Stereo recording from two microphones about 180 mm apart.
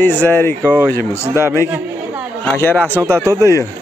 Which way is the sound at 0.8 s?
15° left (ahead or behind).